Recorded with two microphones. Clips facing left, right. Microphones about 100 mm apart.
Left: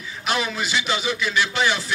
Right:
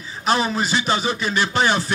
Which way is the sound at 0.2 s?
35° right (ahead or behind).